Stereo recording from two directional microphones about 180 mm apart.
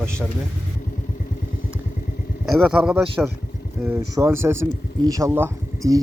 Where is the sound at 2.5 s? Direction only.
Centre (ahead or behind).